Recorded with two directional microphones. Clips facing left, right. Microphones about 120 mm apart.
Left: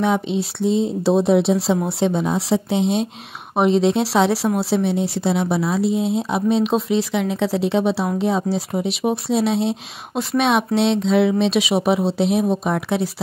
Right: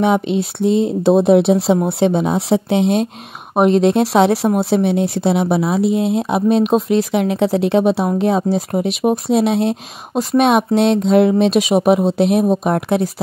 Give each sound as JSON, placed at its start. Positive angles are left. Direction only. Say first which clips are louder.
{"t": 0.0, "sound": "speech", "louder": "right 4 dB", "side_deg": -60}